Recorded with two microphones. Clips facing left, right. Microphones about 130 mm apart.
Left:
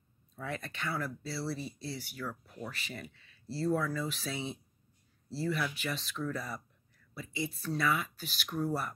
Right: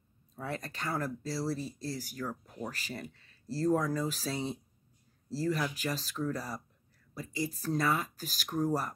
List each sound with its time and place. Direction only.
0.4 s speech: 35° right (ahead or behind)